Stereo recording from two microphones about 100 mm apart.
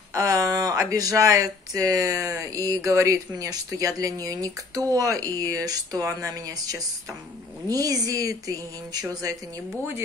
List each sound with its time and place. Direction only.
0.1 s speech: 35° right (ahead or behind)